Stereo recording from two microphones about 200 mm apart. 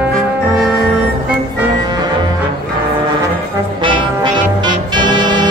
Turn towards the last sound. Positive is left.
turn(degrees=-20)  # may be behind; listen again after turning